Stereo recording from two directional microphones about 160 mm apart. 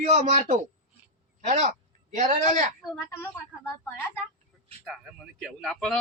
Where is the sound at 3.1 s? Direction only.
15° left (ahead or behind).